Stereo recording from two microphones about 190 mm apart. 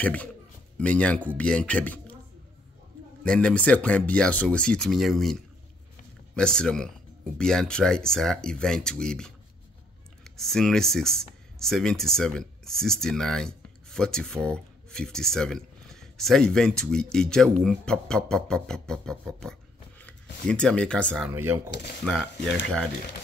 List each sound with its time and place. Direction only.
0.0 s a man's voice: 5° left (ahead or behind)
3.3 s speech: 5° left (ahead or behind)
21.3 s speech: 15° right (ahead or behind)
22.0 s speech: centre (ahead or behind)